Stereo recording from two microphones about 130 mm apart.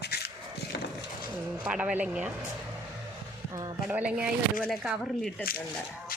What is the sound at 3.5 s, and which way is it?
Speech, 25° right (ahead or behind).